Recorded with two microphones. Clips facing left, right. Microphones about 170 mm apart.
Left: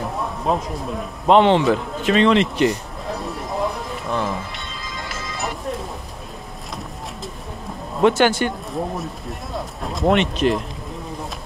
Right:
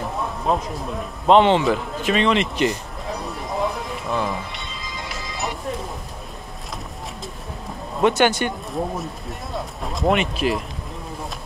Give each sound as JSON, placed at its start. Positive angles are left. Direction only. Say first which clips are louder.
{"t": 0.2, "sound": "a man's voice", "louder": "even", "side_deg": 0}
{"t": 2.0, "sound": "speech", "louder": "left 4 dB", "side_deg": -15}
{"t": 2.7, "sound": "music", "louder": "left 2 dB", "side_deg": 0}
{"t": 8.0, "sound": "speech", "louder": "left 2 dB", "side_deg": -20}
{"t": 8.7, "sound": "speech", "louder": "even", "side_deg": 0}